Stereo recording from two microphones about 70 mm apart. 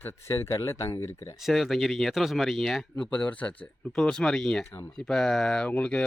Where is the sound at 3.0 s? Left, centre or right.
Centre.